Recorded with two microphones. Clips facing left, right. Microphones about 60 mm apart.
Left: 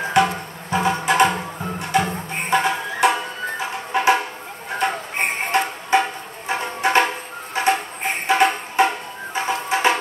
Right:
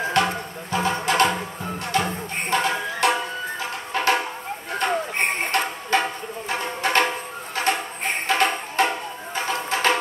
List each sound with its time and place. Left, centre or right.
0.1 s music: centre
4.8 s a sound: centre
5.5 s music: centre